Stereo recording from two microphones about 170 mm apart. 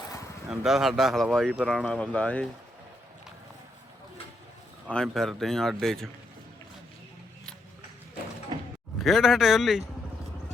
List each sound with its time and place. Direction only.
0.4 s speech: 5° right (ahead or behind)
5.1 s speech: centre (ahead or behind)
8.5 s mechanisms: 25° right (ahead or behind)
9.0 s speech: centre (ahead or behind)